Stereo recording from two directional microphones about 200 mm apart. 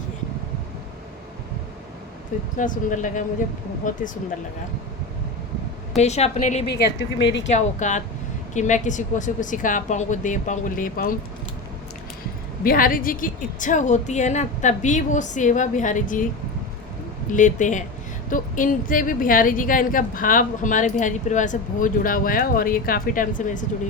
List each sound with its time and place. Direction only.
2.6 s a woman's voice: 40° left (ahead or behind)
6.0 s a woman's voice: 35° left (ahead or behind)
6.7 s speech: 60° left (ahead or behind)
7.4 s a woman's voice: 35° left (ahead or behind)
12.6 s a woman's voice: 45° left (ahead or behind)
17.3 s a woman's voice: 40° left (ahead or behind)